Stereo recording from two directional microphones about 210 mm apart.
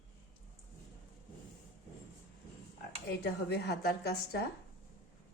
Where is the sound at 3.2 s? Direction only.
50° left (ahead or behind).